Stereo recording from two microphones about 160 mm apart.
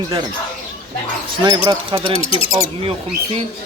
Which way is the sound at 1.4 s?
25° right (ahead or behind).